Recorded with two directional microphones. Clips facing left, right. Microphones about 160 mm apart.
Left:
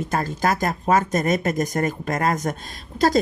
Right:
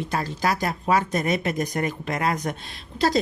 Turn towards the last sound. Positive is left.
turn(degrees=45)  # may be behind; listen again after turning